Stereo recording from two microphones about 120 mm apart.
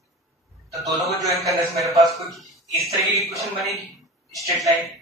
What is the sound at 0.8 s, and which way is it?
A man's voice, centre (ahead or behind).